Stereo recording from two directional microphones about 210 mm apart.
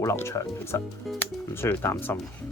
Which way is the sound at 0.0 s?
15° left (ahead or behind).